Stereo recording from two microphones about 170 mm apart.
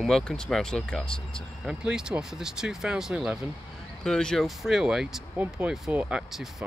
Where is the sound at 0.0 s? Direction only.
Centre (ahead or behind).